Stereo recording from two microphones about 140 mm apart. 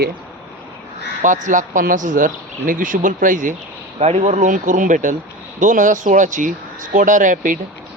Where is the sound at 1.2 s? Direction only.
65° right (ahead or behind).